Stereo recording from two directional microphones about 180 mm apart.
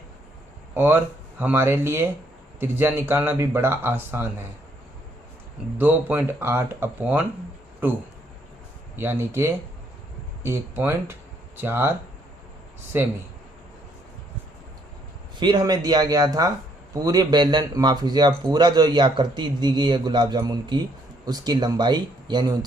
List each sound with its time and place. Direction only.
0.7 s speech: 10° right (ahead or behind)
5.7 s speech: 10° right (ahead or behind)
15.4 s speech: 25° right (ahead or behind)